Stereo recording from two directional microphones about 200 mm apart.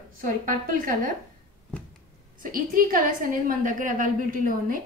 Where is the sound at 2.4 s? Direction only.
45° right (ahead or behind).